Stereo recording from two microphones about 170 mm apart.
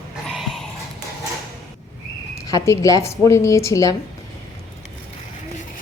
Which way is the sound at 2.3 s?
20° left (ahead or behind).